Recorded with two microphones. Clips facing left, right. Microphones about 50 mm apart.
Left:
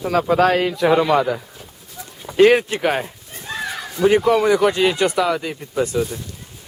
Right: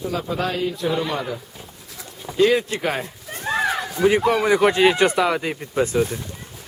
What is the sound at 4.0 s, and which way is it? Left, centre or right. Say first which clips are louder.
Speech: left 2 dB; right.